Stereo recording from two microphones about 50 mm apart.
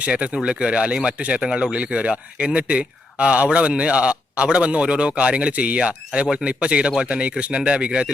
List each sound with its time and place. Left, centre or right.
0.0 s a man's voice: right